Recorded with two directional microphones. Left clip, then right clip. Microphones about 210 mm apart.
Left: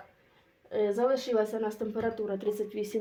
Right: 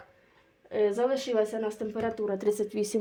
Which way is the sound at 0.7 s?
30° right (ahead or behind).